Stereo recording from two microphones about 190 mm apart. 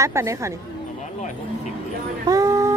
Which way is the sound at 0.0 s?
15° right (ahead or behind).